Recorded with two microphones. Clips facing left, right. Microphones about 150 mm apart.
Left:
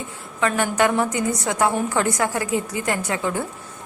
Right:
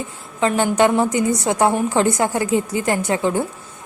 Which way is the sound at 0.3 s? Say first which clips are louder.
Right 4 dB; 30° right (ahead or behind).